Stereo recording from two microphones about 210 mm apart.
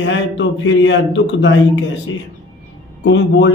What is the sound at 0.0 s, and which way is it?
Speech, 60° left (ahead or behind).